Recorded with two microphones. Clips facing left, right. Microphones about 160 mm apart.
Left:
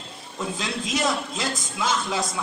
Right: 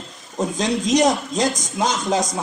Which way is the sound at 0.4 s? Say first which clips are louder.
Right 8 dB; 40° right (ahead or behind).